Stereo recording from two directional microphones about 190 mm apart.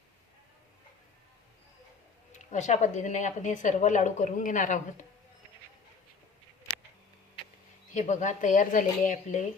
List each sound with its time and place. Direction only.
2.3 s speech: 40° left (ahead or behind)
7.9 s speech: 40° left (ahead or behind)